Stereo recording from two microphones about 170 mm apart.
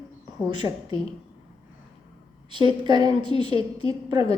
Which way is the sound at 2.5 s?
30° right (ahead or behind).